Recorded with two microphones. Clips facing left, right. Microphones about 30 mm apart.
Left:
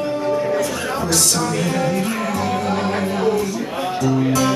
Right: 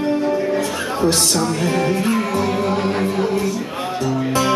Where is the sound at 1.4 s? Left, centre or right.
Centre.